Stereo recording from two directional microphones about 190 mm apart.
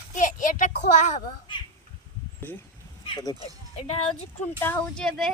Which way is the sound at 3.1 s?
20° left (ahead or behind).